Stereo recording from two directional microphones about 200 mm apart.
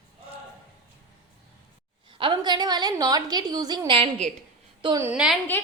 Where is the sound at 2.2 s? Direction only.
20° right (ahead or behind).